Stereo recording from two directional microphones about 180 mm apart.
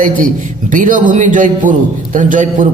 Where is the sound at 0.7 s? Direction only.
45° right (ahead or behind).